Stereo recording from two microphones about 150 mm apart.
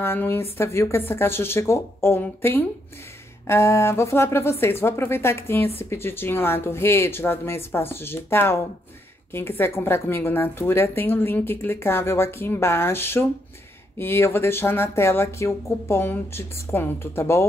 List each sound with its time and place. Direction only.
0.0 s a woman's voice: 15° left (ahead or behind)